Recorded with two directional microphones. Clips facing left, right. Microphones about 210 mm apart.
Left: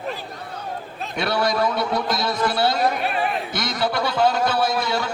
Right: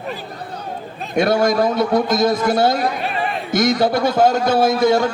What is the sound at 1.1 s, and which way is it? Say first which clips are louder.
A man's voice: right 7 dB; 45° right (ahead or behind).